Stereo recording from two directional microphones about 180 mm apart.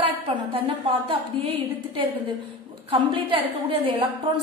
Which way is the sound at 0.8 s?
30° right (ahead or behind).